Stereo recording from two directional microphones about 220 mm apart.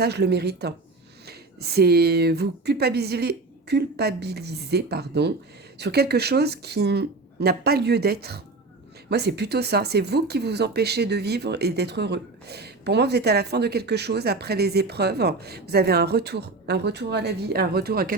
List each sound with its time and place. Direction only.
0.0 s speech: 50° right (ahead or behind)